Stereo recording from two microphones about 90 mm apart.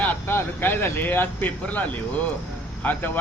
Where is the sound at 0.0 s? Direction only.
20° left (ahead or behind).